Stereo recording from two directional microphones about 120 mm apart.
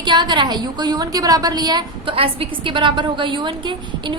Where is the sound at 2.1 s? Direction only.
50° right (ahead or behind).